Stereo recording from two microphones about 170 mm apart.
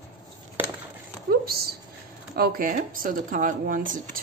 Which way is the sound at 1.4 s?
65° right (ahead or behind).